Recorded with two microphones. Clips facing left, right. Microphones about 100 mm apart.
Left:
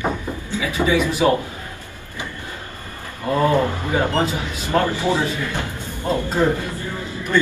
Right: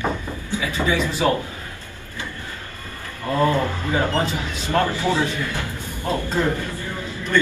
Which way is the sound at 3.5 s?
15° left (ahead or behind).